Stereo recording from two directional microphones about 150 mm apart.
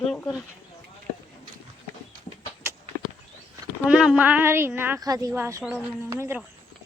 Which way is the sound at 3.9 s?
5° right (ahead or behind).